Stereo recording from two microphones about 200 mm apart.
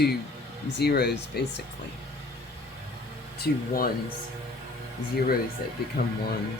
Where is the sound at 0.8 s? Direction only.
55° left (ahead or behind).